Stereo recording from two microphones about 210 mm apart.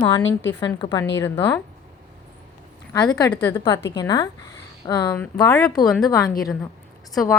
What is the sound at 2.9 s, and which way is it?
A woman's voice, 20° left (ahead or behind).